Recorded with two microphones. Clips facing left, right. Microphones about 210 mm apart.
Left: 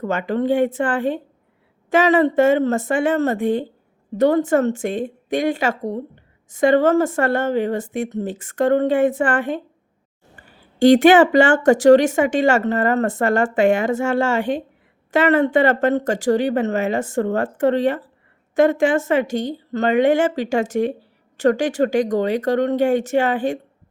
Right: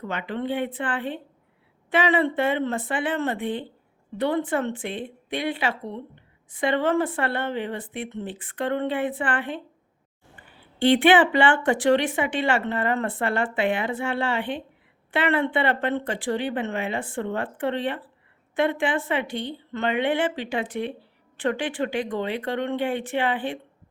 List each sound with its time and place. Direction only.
0.0 s speech: 45° left (ahead or behind)